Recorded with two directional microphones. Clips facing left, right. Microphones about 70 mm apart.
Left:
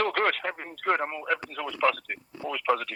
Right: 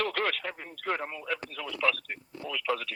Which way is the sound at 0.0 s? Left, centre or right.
Left.